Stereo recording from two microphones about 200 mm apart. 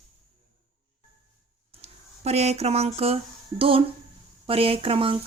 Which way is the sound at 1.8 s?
35° right (ahead or behind).